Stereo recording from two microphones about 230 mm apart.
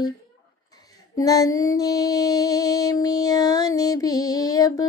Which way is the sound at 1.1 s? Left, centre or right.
Centre.